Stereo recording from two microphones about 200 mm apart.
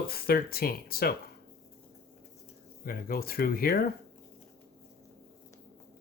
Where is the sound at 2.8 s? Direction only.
50° left (ahead or behind).